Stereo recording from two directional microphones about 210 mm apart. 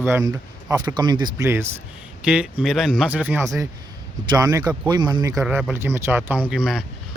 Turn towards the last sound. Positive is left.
turn(degrees=-5)  # may be behind; listen again after turning